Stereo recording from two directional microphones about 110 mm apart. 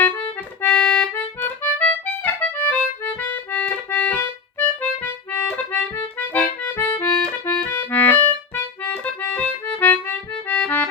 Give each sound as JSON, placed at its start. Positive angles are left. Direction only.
{"t": 0.0, "sound": "accordion", "side_deg": 15}
{"t": 4.5, "sound": "music", "side_deg": 10}
{"t": 5.5, "sound": "accordion", "side_deg": 15}